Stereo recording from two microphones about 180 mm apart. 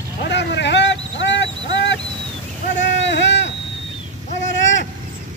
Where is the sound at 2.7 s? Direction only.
80° left.